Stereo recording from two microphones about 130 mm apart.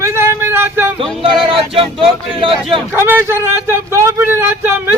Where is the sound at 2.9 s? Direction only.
15° right (ahead or behind).